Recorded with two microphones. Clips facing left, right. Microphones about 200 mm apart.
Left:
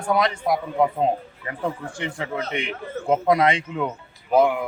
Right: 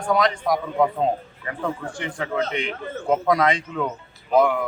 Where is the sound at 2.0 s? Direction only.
25° left (ahead or behind).